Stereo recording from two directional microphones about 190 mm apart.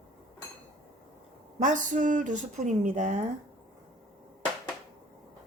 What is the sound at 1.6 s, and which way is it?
Speech, 40° right (ahead or behind).